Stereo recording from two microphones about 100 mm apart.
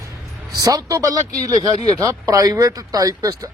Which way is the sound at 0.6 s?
35° right (ahead or behind).